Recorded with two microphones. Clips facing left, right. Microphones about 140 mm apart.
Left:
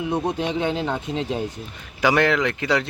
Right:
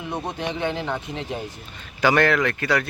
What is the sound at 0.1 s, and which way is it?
Speech, 15° left (ahead or behind).